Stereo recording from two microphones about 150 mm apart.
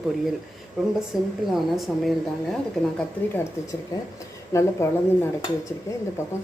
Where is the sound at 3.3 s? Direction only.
20° left (ahead or behind).